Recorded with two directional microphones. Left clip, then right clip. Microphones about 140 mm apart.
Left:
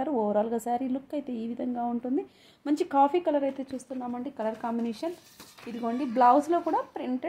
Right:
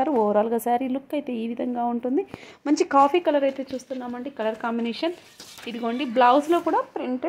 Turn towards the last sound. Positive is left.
turn(degrees=-20)  # may be behind; listen again after turning